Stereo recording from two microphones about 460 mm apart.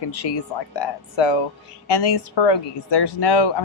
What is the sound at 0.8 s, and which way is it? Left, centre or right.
Speech, left.